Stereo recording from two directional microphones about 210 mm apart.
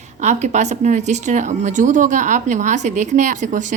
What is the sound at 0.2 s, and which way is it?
A woman's voice, 35° right (ahead or behind).